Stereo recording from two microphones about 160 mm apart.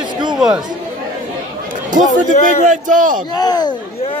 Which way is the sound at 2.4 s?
50° right (ahead or behind).